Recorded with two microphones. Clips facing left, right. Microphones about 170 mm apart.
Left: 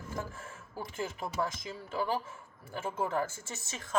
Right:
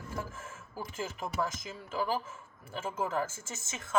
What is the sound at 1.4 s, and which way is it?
Speech, 30° left (ahead or behind).